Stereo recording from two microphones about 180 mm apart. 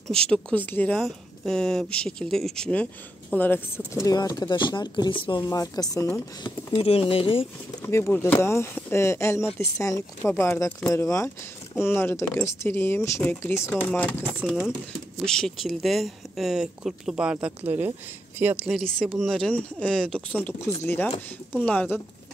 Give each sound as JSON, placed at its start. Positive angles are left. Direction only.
{"t": 0.1, "sound": "speech", "side_deg": 5}
{"t": 6.4, "sound": "speech", "side_deg": 30}
{"t": 8.2, "sound": "speech", "side_deg": 15}